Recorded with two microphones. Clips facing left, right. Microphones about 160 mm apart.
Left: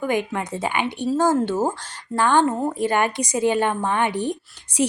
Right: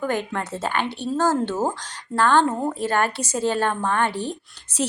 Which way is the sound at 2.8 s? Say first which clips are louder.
Left 3 dB; 15° left (ahead or behind).